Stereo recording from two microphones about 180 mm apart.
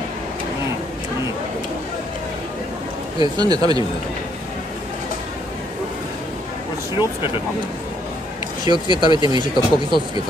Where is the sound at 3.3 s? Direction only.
20° right (ahead or behind).